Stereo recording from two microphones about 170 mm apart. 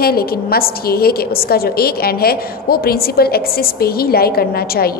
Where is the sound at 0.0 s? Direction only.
65° left (ahead or behind).